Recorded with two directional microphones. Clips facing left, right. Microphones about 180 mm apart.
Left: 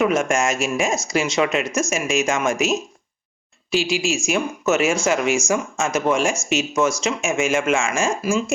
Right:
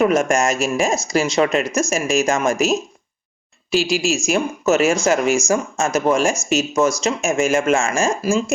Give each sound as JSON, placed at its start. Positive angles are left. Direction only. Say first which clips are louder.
{"t": 0.0, "sound": "speech", "louder": "right 3 dB", "side_deg": -40}